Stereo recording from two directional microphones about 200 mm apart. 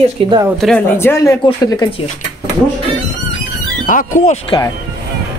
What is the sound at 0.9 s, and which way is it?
Speech, 15° left (ahead or behind).